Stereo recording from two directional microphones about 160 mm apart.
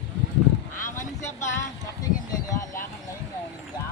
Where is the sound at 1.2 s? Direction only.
15° left (ahead or behind).